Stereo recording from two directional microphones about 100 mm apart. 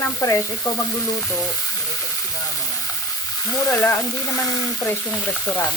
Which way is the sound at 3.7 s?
25° left (ahead or behind).